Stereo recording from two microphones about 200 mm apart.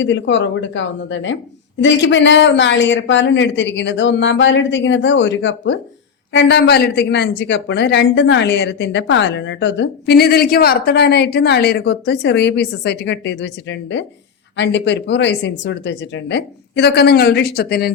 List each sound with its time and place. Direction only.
0.0 s a woman's voice: 65° left (ahead or behind); by 17.9 s 50° left (ahead or behind)